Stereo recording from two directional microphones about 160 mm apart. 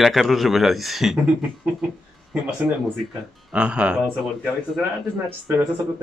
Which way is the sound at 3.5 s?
5° right (ahead or behind).